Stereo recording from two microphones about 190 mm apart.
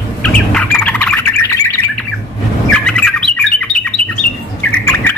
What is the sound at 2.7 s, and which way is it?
Bird, 5° left (ahead or behind).